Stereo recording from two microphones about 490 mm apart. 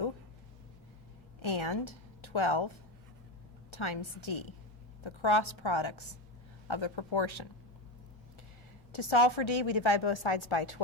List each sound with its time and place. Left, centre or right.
1.4 s a woman's voice: left
8.9 s a woman's voice: left